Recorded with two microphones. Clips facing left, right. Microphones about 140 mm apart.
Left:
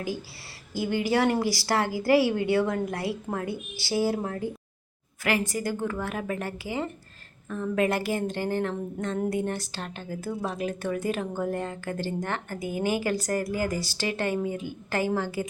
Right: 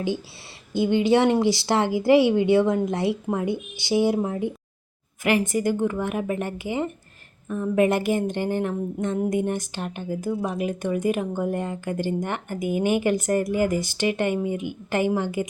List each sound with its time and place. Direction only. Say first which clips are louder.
0.7 s speech: right 6 dB; 25° right (ahead or behind)